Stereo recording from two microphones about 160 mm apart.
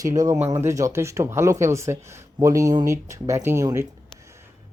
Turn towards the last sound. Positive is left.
turn(degrees=-15)  # may be behind; listen again after turning